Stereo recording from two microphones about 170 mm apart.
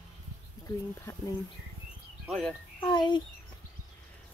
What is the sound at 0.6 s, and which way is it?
Speech, 20° left (ahead or behind).